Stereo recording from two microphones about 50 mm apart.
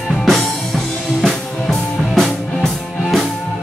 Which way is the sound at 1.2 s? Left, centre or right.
Centre.